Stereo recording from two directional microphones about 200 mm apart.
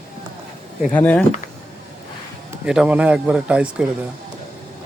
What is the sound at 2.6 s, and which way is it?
Speech, 5° right (ahead or behind).